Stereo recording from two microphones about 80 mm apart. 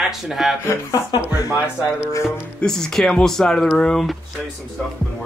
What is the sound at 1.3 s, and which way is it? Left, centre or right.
Speech, left.